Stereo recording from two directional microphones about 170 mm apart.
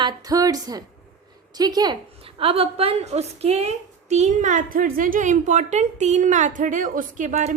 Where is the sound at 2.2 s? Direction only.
35° right (ahead or behind).